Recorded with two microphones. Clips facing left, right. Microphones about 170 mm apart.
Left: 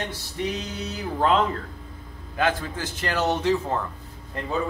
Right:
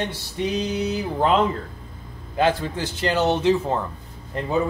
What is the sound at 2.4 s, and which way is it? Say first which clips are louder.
A man's voice: right 4 dB; 30° right (ahead or behind).